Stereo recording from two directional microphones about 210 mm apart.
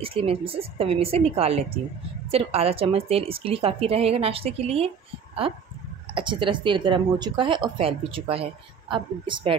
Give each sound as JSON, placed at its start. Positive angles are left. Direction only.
{"t": 0.0, "sound": "speech", "side_deg": -25}